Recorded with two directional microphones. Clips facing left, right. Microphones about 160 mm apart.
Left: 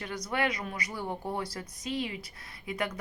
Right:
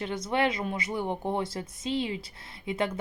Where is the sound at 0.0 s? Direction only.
25° right (ahead or behind).